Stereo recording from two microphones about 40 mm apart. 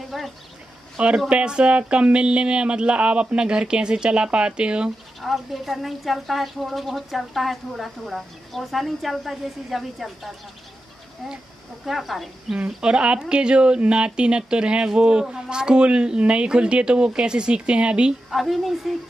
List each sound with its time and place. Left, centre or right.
0.1 s a sound: centre
0.9 s speech: right
5.2 s speech: centre
11.8 s speech: centre
12.6 s speech: right
18.3 s speech: centre